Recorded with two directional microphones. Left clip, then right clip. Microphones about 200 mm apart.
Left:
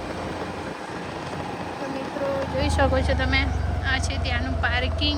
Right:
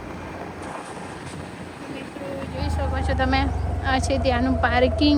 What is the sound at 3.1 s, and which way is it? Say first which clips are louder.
A woman's voice: right 1 dB; 5° right (ahead or behind).